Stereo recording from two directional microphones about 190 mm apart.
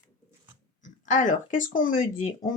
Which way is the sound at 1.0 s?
40° left (ahead or behind).